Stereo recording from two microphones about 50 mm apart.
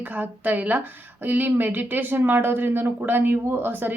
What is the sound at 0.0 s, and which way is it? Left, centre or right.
Speech, right.